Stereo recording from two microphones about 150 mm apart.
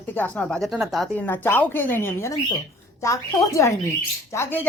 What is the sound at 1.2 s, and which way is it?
A woman's voice, 15° left (ahead or behind).